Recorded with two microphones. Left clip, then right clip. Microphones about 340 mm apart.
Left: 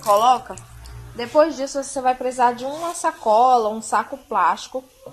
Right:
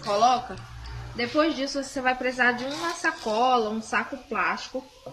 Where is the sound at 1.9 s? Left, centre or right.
Left.